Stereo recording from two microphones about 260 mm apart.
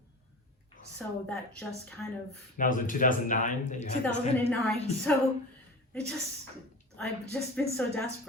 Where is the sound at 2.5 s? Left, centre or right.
Left.